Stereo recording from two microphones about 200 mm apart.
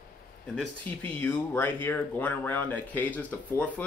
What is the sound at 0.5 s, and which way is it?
Speech, 5° left (ahead or behind).